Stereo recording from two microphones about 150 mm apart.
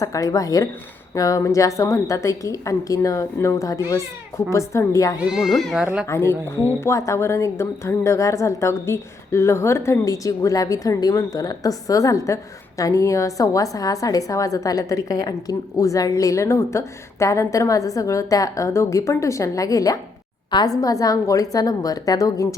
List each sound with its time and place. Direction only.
0.0 s a woman's voice: 20° left (ahead or behind)
5.3 s speech: centre (ahead or behind)
6.1 s a woman's voice: 15° left (ahead or behind)